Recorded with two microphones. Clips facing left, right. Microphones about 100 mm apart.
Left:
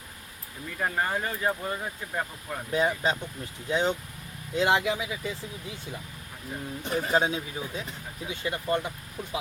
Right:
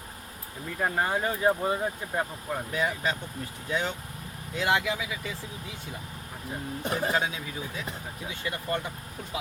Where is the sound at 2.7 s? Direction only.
25° left (ahead or behind).